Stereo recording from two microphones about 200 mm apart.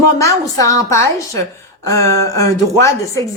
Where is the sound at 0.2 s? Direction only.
15° left (ahead or behind).